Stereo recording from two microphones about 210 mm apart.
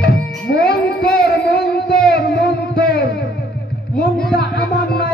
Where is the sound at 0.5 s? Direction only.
50° left (ahead or behind).